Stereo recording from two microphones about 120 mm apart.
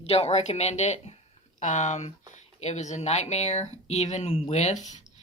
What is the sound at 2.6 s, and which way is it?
Speech, 70° left (ahead or behind).